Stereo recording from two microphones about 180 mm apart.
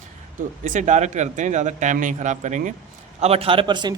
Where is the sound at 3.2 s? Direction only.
35° right (ahead or behind).